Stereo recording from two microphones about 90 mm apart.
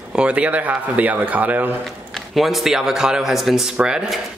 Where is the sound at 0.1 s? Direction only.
10° right (ahead or behind).